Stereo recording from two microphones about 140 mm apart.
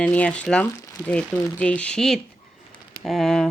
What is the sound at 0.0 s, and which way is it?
Speech, 10° left (ahead or behind).